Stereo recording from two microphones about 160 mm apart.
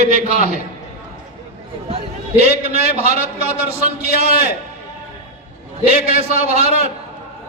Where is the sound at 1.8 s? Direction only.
40° right (ahead or behind).